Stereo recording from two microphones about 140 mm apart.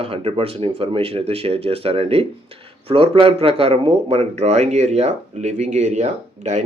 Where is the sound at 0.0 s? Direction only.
45° right (ahead or behind).